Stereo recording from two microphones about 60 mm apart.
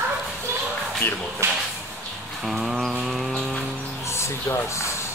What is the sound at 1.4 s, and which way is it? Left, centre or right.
Drawer open or close, right.